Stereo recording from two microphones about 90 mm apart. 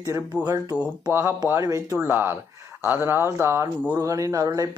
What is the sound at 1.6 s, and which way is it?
Speech, 40° right (ahead or behind).